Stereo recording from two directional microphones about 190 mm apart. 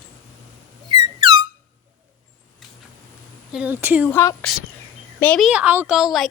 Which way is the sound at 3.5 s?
5° right (ahead or behind).